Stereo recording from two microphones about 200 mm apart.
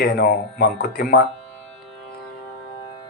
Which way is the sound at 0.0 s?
50° left (ahead or behind).